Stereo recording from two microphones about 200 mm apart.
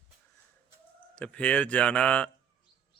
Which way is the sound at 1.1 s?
5° left (ahead or behind).